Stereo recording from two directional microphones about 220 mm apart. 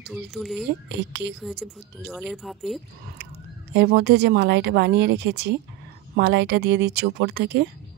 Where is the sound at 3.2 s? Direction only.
50° right (ahead or behind).